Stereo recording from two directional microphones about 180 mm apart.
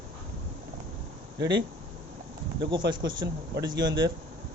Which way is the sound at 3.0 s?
25° right (ahead or behind).